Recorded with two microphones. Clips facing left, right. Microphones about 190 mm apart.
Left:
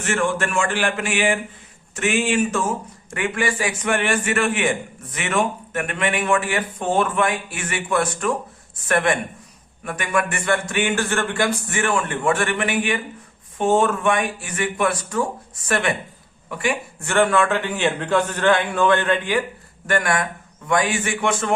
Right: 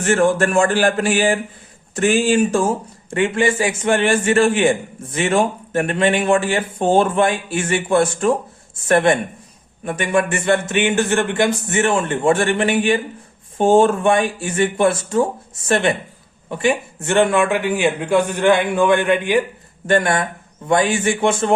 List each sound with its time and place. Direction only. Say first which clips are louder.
0.0 s a man's voice: right 7 dB; 35° right (ahead or behind); by 19.4 s 15° right (ahead or behind)
19.9 s speech: right 4 dB; 25° right (ahead or behind)